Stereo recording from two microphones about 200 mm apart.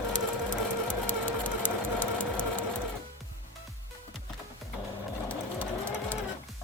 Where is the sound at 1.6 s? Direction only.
10° left (ahead or behind).